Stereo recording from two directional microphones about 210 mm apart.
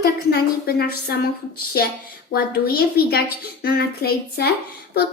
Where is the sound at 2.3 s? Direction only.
45° left (ahead or behind).